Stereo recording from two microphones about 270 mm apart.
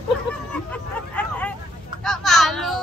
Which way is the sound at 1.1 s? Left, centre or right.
Centre.